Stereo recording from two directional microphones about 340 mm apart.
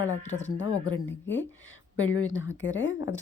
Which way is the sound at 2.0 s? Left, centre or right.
Left.